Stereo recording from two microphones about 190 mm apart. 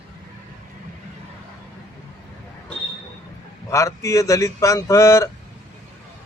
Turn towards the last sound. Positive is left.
turn(degrees=15)  # may be behind; listen again after turning